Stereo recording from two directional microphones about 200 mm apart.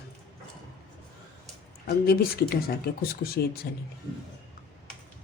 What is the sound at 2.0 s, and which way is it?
A woman's voice, 50° left (ahead or behind).